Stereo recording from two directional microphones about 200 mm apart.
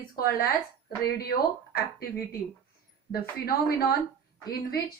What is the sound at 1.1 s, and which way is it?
Speech, 50° left (ahead or behind).